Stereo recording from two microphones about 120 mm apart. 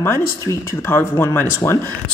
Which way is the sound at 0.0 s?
20° left (ahead or behind).